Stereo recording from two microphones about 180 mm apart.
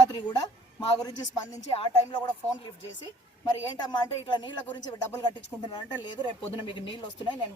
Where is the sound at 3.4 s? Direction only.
25° left (ahead or behind).